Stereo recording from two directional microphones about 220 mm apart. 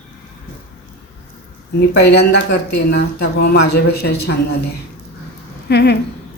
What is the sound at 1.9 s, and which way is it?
A woman's voice, 50° left (ahead or behind).